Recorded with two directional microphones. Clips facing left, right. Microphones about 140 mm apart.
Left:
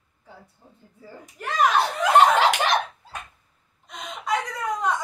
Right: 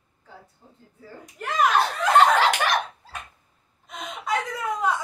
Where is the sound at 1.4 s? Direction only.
Centre (ahead or behind).